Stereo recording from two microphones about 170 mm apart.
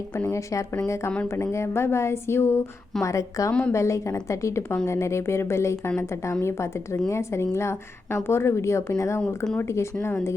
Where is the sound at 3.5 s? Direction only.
5° left (ahead or behind).